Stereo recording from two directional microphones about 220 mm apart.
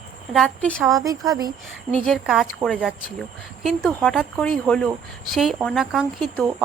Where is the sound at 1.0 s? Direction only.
15° right (ahead or behind).